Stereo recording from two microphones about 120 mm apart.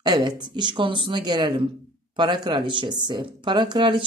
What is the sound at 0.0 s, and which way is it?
Speech, 35° right (ahead or behind).